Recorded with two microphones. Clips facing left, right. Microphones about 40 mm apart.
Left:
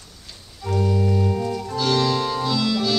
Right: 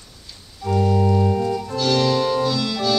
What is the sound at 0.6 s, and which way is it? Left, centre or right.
Organ, centre.